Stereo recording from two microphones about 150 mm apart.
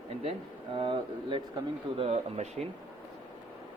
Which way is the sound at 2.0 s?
45° right (ahead or behind).